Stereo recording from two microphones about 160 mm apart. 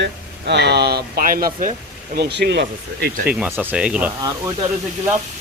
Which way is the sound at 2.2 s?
90° right.